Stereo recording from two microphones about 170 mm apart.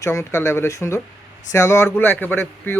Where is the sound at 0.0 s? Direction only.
15° left (ahead or behind).